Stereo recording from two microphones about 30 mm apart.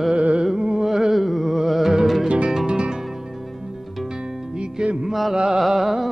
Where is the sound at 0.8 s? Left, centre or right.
Centre.